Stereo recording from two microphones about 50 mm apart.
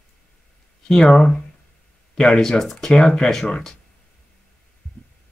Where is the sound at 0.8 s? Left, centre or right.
Centre.